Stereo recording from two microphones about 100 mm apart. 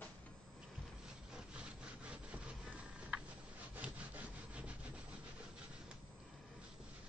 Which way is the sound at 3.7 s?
15° right (ahead or behind).